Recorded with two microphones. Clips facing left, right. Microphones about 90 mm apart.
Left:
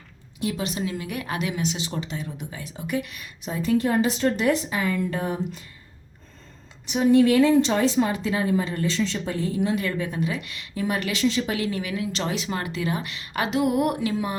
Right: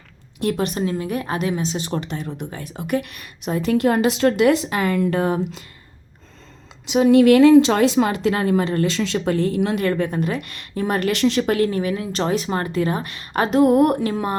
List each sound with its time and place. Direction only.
0.3 s a woman's voice: 55° right (ahead or behind); by 1.8 s 35° right (ahead or behind)
1.8 s speech: 50° right (ahead or behind); by 5.6 s 90° right
6.8 s a woman's voice: 90° right; by 14.3 s 45° right (ahead or behind)